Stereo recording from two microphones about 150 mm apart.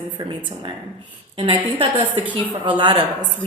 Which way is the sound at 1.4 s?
35° right (ahead or behind).